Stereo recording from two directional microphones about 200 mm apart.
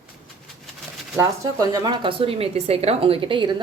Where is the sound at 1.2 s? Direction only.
15° right (ahead or behind).